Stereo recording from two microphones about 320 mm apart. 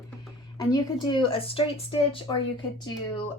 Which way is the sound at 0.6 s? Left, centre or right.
Centre.